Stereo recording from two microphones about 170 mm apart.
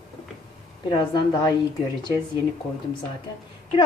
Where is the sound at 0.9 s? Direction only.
25° left (ahead or behind).